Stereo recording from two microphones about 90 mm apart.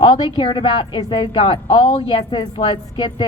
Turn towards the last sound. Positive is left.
turn(degrees=60)  # may be behind; listen again after turning